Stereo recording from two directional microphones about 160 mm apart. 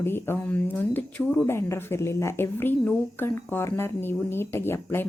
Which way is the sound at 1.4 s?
15° left (ahead or behind).